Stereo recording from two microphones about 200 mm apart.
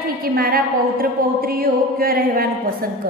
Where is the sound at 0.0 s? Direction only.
45° right (ahead or behind).